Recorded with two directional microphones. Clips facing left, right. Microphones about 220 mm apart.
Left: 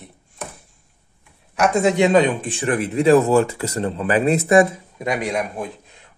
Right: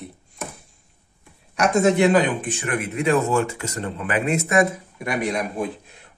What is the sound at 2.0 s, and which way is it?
Speech, 25° left (ahead or behind).